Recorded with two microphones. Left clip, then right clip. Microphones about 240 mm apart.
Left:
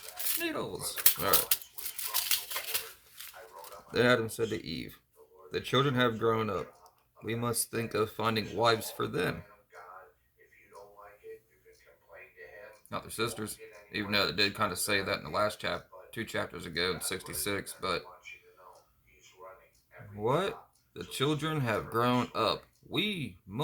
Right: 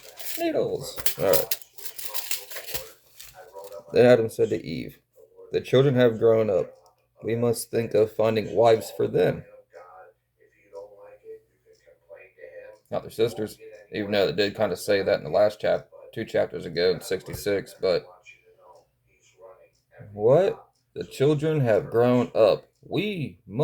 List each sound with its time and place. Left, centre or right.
0.3 s speech: centre
3.9 s speech: centre
12.9 s speech: centre
20.9 s speech: centre